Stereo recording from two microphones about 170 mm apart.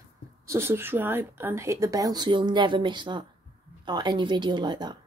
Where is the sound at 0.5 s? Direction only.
15° right (ahead or behind).